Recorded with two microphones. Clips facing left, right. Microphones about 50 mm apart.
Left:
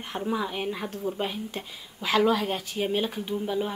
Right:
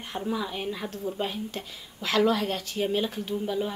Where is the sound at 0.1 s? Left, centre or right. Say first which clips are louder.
Left 2 dB; centre.